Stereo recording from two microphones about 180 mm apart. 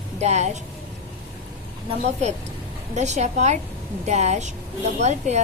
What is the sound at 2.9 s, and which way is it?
A woman's voice, 40° right (ahead or behind).